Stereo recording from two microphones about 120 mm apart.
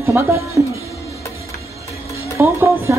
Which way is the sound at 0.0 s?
20° right (ahead or behind).